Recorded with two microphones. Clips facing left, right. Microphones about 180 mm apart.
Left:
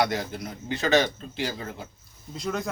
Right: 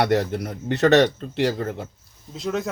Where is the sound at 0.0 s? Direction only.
65° right (ahead or behind).